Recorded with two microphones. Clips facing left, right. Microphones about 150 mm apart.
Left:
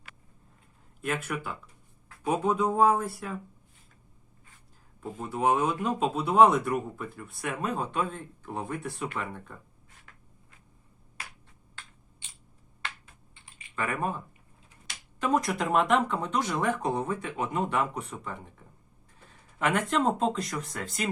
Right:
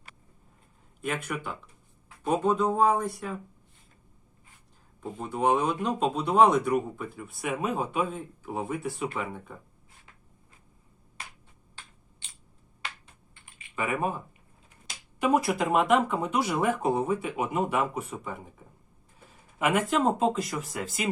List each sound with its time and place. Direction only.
1.0 s speech: centre (ahead or behind)
4.9 s speech: centre (ahead or behind)
10.1 s a sound: 20° right (ahead or behind)
13.7 s speech: 5° right (ahead or behind)
15.2 s speech: 10° right (ahead or behind)
19.5 s speech: 5° right (ahead or behind)